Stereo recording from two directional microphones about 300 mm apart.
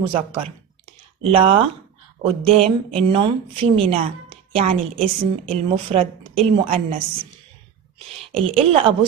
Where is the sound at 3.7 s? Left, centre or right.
Centre.